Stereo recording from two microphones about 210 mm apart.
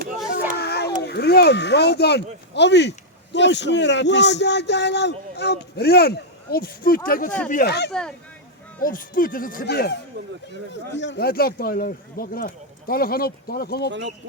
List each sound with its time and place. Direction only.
0.5 s a sound: 50° left (ahead or behind)
1.0 s a man's voice: 50° left (ahead or behind)
7.3 s speech: 5° left (ahead or behind)
7.5 s speech: 50° left (ahead or behind)
8.8 s speech: 40° left (ahead or behind)